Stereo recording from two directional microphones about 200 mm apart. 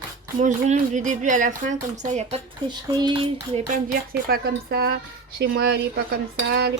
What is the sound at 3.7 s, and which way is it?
Speech, 50° right (ahead or behind).